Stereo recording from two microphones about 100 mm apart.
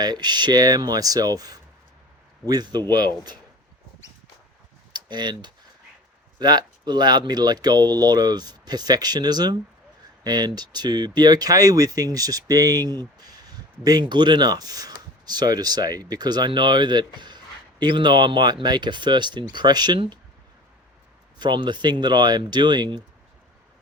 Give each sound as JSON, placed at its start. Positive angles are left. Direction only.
{"t": 0.0, "sound": "speech", "side_deg": -45}
{"t": 4.9, "sound": "speech", "side_deg": -45}
{"t": 21.3, "sound": "speech", "side_deg": -45}